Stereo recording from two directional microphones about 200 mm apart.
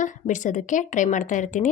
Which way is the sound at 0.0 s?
40° left (ahead or behind).